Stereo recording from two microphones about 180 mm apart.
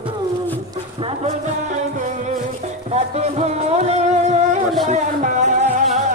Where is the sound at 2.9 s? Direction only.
35° right (ahead or behind).